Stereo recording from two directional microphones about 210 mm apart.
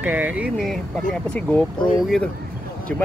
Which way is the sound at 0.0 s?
10° right (ahead or behind).